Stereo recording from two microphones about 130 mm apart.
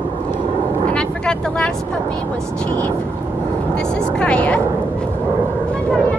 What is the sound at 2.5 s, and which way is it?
Speech, 10° left (ahead or behind).